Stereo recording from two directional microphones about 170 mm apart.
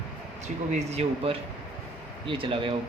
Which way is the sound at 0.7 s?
35° right (ahead or behind).